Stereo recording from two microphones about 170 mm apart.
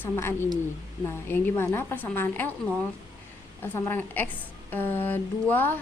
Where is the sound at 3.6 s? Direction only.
15° left (ahead or behind).